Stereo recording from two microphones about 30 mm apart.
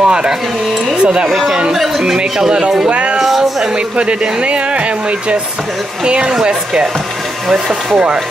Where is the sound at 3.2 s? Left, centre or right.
Centre.